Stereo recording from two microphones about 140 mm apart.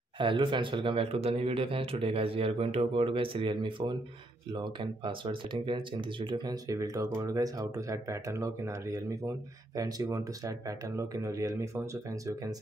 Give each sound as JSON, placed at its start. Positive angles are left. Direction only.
{"t": 0.2, "sound": "speech", "side_deg": -35}